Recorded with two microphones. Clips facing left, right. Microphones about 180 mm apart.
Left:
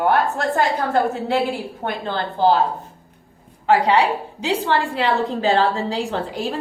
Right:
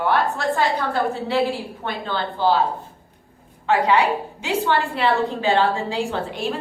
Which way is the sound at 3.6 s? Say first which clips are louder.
Left 2 dB; 35° left (ahead or behind).